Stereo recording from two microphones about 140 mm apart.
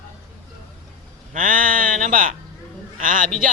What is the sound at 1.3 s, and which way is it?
Speech, 75° right (ahead or behind).